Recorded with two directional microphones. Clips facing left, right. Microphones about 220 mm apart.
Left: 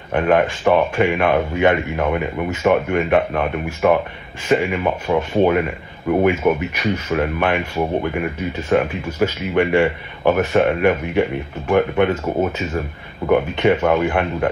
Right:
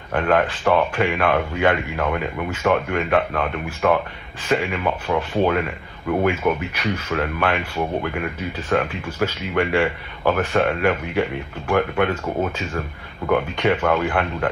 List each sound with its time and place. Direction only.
0.1 s speech: 15° left (ahead or behind)